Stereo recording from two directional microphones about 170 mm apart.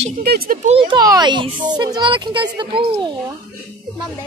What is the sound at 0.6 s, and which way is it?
A child's voice, 30° right (ahead or behind).